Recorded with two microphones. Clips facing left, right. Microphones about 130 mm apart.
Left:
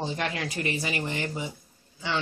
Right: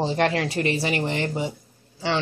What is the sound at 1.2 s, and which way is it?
Speech, 30° right (ahead or behind).